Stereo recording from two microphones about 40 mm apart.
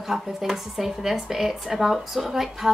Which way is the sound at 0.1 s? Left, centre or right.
Right.